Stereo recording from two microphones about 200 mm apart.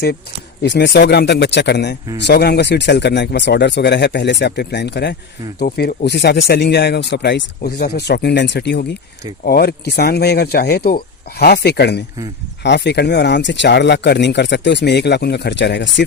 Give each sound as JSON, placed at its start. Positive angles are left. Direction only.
{"t": 0.6, "sound": "speech", "side_deg": 60}